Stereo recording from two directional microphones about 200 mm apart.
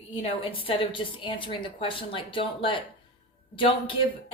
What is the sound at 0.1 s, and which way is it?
A woman's voice, 25° left (ahead or behind).